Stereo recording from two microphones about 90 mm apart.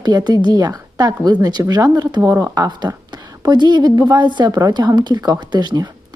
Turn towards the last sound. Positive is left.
turn(degrees=-50)  # may be behind; listen again after turning